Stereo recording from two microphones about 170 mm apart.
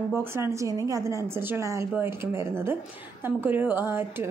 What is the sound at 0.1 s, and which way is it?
Speech, 15° right (ahead or behind).